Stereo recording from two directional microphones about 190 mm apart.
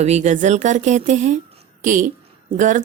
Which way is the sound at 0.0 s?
35° right (ahead or behind).